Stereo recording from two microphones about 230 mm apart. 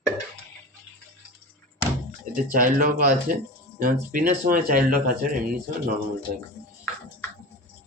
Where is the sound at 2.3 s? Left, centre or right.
Right.